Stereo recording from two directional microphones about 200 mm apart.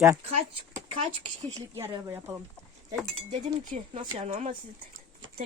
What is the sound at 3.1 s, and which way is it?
Speech, 35° right (ahead or behind).